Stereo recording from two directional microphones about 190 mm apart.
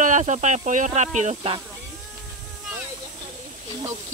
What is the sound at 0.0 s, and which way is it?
Speech, 40° right (ahead or behind).